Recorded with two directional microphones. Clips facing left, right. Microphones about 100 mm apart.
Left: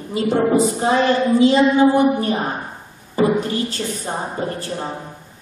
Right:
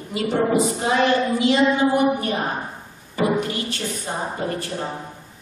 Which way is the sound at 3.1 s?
30° left (ahead or behind).